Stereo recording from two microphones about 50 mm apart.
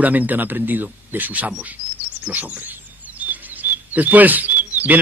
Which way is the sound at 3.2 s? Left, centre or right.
Right.